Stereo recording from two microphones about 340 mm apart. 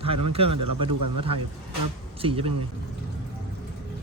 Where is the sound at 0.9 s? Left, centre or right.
Right.